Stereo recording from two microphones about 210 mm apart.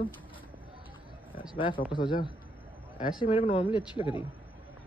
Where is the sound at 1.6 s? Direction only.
25° left (ahead or behind).